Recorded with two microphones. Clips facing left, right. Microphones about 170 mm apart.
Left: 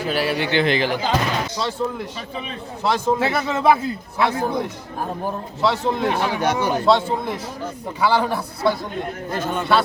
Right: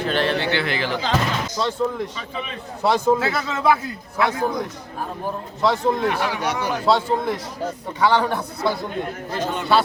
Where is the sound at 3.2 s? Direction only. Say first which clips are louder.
Left 3 dB; 25° left (ahead or behind).